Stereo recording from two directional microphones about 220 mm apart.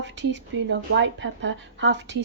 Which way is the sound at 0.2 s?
55° right (ahead or behind).